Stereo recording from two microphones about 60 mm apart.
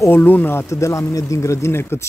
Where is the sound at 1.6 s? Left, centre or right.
Left.